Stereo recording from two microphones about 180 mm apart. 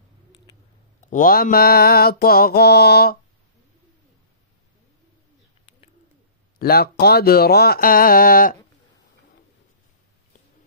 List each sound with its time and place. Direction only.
1.1 s mantra: 50° left (ahead or behind)
6.6 s mantra: 60° left (ahead or behind)